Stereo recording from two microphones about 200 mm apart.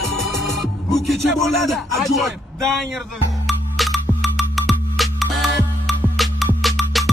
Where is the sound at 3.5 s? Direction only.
Centre (ahead or behind).